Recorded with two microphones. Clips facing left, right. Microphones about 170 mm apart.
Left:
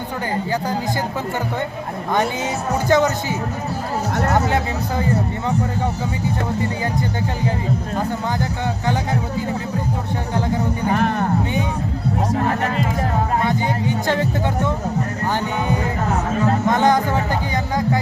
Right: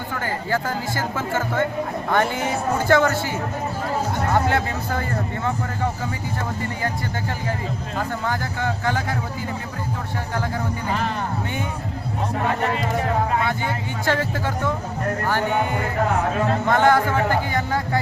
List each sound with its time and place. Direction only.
2.9 s speech: 20° left (ahead or behind)
10.3 s speech: 20° left (ahead or behind)
10.9 s music: 55° left (ahead or behind)
13.4 s speech: 15° left (ahead or behind)
16.6 s speech: 15° left (ahead or behind)